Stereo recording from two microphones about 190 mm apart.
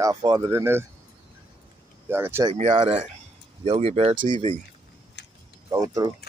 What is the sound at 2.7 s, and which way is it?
Speech, 35° right (ahead or behind).